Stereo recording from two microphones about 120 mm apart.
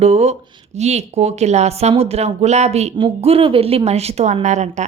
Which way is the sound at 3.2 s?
55° right (ahead or behind).